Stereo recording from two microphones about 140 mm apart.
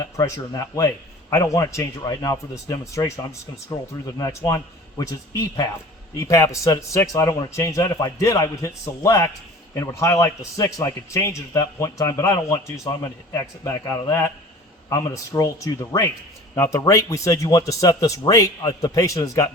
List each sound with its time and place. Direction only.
0.0 s a man's voice: 25° left (ahead or behind)